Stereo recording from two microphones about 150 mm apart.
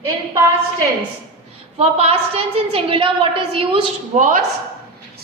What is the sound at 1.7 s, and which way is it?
A woman's voice, 40° right (ahead or behind).